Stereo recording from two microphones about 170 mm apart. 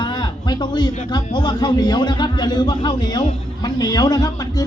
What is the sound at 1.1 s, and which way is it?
Speech, 25° left (ahead or behind).